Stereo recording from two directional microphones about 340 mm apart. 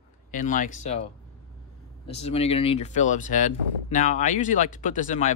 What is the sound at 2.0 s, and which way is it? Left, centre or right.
Speech, centre.